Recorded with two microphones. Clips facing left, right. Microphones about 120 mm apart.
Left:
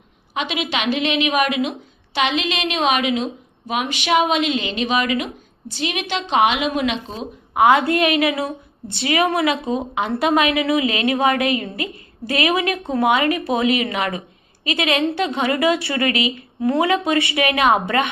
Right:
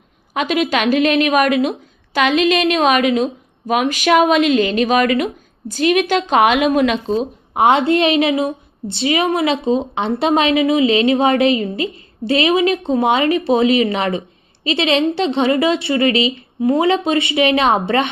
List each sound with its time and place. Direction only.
0.3 s a woman's voice: 45° right (ahead or behind); by 18.1 s 30° right (ahead or behind)